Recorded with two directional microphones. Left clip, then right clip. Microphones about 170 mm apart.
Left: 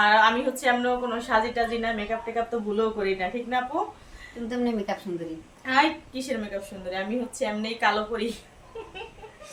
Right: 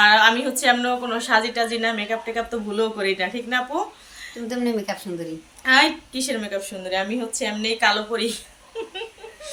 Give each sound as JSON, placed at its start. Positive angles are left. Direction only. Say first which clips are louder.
{"t": 0.0, "sound": "a woman's voice", "louder": "right 4 dB", "side_deg": 15}
{"t": 4.4, "sound": "speech", "louder": "right 3 dB", "side_deg": -45}
{"t": 5.6, "sound": "a woman's voice", "louder": "right 6 dB", "side_deg": 10}